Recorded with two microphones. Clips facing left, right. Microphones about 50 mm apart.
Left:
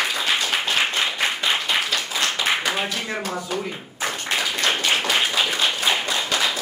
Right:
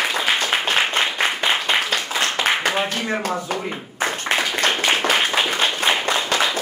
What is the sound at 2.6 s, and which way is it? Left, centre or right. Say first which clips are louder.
Speech: right 3 dB; right.